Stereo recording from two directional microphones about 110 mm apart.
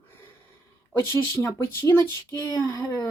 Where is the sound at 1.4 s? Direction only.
25° left (ahead or behind).